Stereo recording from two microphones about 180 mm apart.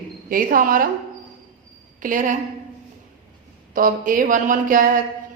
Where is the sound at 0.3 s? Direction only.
50° right (ahead or behind).